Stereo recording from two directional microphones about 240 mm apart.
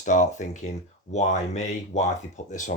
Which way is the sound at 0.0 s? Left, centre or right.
Left.